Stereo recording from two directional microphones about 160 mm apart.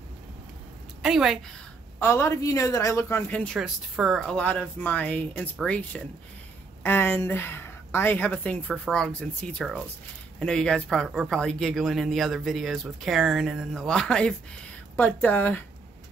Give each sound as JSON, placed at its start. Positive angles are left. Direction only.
{"t": 1.0, "sound": "speech", "side_deg": 0}
{"t": 2.0, "sound": "speech", "side_deg": 15}
{"t": 3.5, "sound": "a woman's voice", "side_deg": -5}